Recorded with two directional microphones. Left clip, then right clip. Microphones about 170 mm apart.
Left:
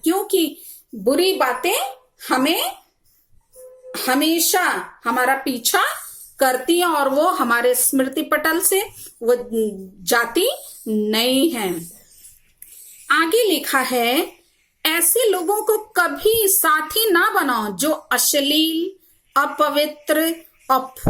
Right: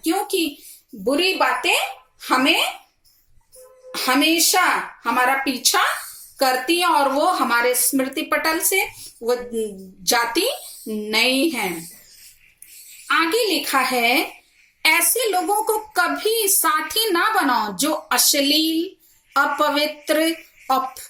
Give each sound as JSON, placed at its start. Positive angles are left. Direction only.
{"t": 0.1, "sound": "a sound", "side_deg": 15}
{"t": 1.0, "sound": "speech", "side_deg": 25}
{"t": 3.9, "sound": "a woman's voice", "side_deg": 15}
{"t": 13.1, "sound": "a woman's voice", "side_deg": 15}
{"t": 15.3, "sound": "a woman's voice", "side_deg": 20}